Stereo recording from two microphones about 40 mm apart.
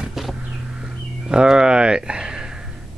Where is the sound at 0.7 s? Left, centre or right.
Right.